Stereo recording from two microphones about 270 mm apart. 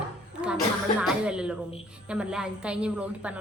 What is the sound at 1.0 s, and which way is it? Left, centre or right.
A woman's voice, centre.